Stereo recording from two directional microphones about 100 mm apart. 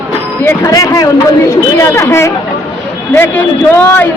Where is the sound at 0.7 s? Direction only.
35° left (ahead or behind).